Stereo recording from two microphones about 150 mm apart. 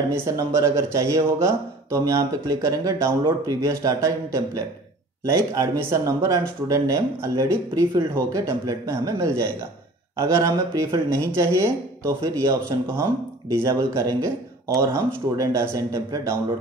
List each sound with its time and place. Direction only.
0.1 s speech: 20° right (ahead or behind)